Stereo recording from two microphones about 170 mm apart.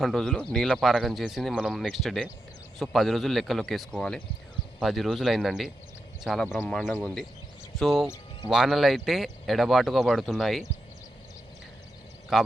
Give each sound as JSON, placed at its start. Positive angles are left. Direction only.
{"t": 0.0, "sound": "speech", "side_deg": 0}
{"t": 8.0, "sound": "music", "side_deg": 15}
{"t": 8.4, "sound": "speech", "side_deg": 0}
{"t": 12.3, "sound": "speech", "side_deg": 0}